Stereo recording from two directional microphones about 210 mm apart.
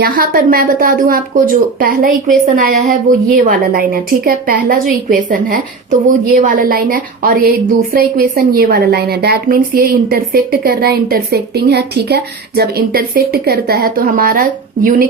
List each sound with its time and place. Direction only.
0.0 s a woman's voice: 45° right (ahead or behind)